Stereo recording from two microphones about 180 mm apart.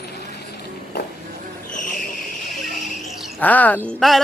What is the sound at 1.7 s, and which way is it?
Vehicle, 45° left (ahead or behind).